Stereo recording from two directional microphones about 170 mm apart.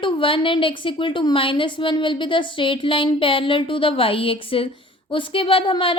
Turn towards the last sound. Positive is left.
turn(degrees=30)  # may be behind; listen again after turning